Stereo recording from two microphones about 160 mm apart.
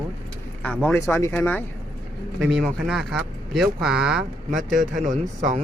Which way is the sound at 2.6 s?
Centre (ahead or behind).